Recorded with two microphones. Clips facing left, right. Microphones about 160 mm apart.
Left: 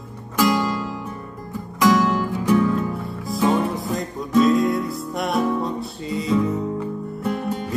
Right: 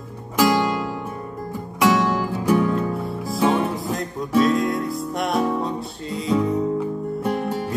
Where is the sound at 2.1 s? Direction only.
5° right (ahead or behind).